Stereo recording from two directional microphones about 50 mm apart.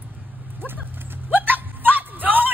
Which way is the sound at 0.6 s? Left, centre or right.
Right.